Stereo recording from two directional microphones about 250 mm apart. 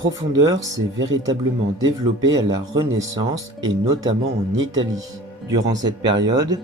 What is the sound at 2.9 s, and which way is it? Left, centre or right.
Speech, centre.